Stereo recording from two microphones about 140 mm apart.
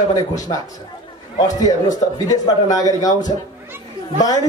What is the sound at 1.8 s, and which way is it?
A man's voice, 25° left (ahead or behind).